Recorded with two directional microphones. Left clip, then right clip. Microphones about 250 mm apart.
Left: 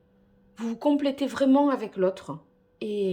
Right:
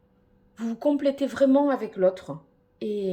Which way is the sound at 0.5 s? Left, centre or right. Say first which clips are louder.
Even; centre.